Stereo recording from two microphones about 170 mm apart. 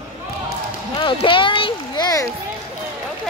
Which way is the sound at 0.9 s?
30° left (ahead or behind).